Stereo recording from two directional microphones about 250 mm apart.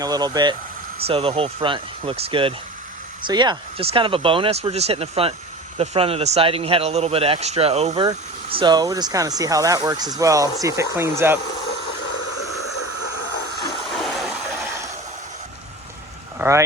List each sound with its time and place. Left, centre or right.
0.0 s speech: centre
16.4 s speech: centre